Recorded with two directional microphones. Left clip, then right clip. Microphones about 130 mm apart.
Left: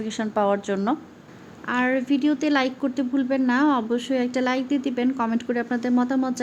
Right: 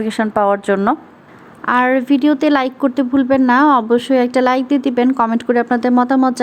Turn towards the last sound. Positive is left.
turn(degrees=-35)  # may be behind; listen again after turning